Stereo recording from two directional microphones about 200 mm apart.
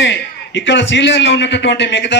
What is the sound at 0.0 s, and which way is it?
A man's voice, 60° left (ahead or behind).